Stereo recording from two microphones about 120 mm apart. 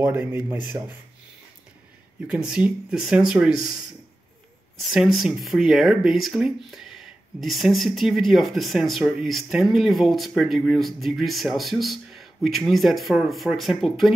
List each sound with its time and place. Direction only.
0.0 s speech: 15° right (ahead or behind)
2.2 s speech: 5° right (ahead or behind)
4.7 s speech: centre (ahead or behind)